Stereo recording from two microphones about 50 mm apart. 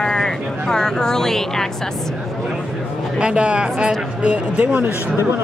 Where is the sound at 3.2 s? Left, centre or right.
Right.